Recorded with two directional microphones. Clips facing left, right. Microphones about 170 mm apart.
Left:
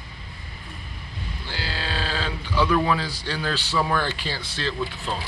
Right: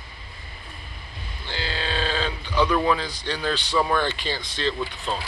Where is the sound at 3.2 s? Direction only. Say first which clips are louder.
Right 5 dB; 5° left (ahead or behind).